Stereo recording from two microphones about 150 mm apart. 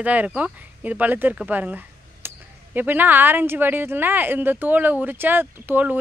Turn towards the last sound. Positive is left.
turn(degrees=-10)  # may be behind; listen again after turning